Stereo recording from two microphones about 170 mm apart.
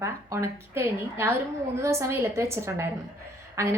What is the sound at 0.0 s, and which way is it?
A woman's voice, 15° right (ahead or behind).